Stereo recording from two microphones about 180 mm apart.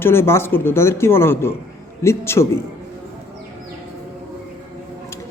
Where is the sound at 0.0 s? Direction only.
15° left (ahead or behind).